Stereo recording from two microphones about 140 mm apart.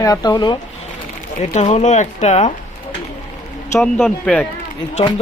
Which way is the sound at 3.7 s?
5° left (ahead or behind).